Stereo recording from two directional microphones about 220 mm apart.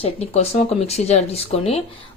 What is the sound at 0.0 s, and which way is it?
Speech, 30° left (ahead or behind).